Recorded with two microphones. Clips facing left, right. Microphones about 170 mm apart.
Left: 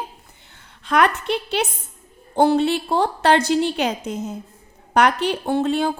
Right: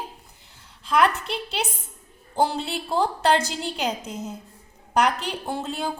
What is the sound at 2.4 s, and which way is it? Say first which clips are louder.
A woman's voice: left 8 dB; 60° left (ahead or behind).